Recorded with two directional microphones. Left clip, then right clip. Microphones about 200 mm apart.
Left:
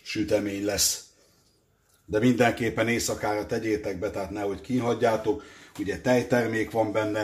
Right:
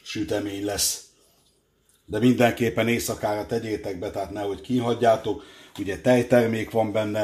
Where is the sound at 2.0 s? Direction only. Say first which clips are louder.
Right 2 dB; 20° right (ahead or behind).